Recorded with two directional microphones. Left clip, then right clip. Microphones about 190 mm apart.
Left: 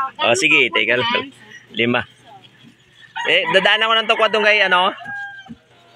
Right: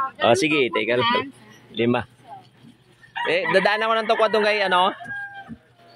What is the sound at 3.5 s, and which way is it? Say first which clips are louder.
Speech: left 4 dB; 5° right (ahead or behind).